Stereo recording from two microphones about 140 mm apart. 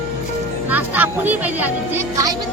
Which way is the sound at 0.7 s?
10° right (ahead or behind).